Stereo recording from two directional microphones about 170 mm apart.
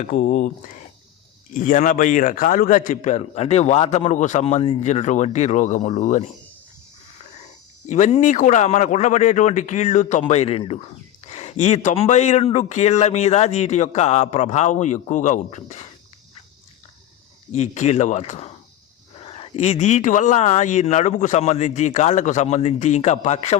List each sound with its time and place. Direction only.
0.1 s a man's voice: 50° left (ahead or behind)
1.5 s a man's voice: 50° left (ahead or behind)
7.9 s a man's voice: 45° left (ahead or behind)
17.5 s a man's voice: 40° left (ahead or behind)